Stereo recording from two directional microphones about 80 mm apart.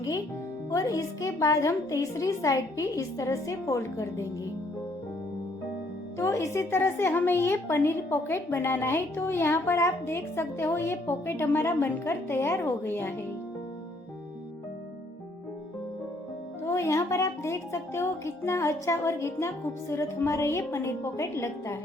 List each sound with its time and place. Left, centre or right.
0.7 s a woman's voice: left
6.1 s speech: left
16.6 s speech: left